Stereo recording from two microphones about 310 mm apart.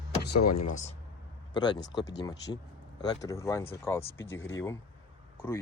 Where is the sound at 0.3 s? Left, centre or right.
Left.